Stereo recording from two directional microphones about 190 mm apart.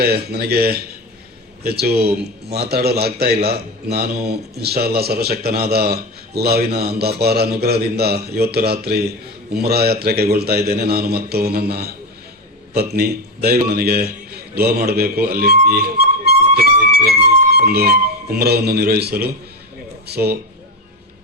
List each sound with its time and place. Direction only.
0.0 s a man's voice: 55° right (ahead or behind)